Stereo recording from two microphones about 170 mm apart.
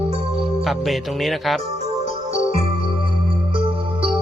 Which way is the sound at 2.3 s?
35° right (ahead or behind).